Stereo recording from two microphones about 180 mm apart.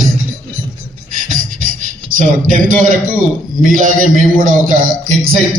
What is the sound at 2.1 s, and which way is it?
A man's voice, 50° right (ahead or behind).